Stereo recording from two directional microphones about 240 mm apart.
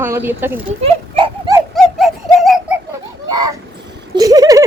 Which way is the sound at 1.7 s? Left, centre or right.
Centre.